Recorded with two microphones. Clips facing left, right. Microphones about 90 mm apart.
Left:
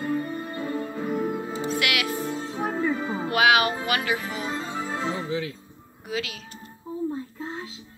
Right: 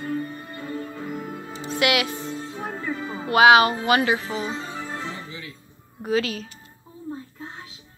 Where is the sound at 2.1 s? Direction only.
15° left (ahead or behind).